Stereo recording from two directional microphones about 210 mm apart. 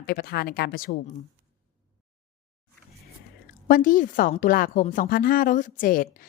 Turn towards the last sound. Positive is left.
turn(degrees=40)  # may be behind; listen again after turning